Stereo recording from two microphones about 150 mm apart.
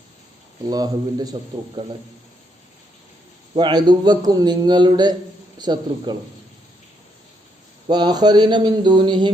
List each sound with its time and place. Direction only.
0.7 s a man's voice: 25° right (ahead or behind)
3.5 s a man's voice: 30° right (ahead or behind)
7.9 s a man's voice: 30° right (ahead or behind)